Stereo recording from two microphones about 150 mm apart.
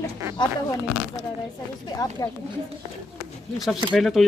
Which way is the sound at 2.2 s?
25° left (ahead or behind).